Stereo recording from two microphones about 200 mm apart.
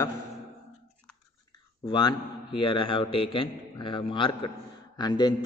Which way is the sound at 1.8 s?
20° left (ahead or behind).